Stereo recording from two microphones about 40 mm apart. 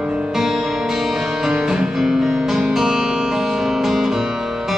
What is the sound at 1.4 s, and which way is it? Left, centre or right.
Music, centre.